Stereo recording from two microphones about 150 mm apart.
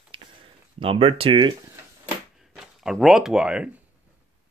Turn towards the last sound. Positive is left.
turn(degrees=-5)  # may be behind; listen again after turning